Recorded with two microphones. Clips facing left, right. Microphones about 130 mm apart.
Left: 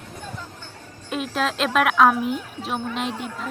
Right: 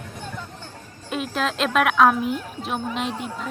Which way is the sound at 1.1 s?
Centre (ahead or behind).